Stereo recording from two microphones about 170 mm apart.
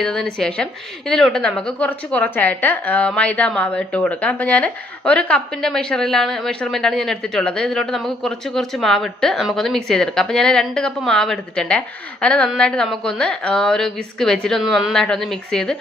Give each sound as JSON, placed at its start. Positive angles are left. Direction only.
{"t": 0.0, "sound": "a woman's voice", "side_deg": 5}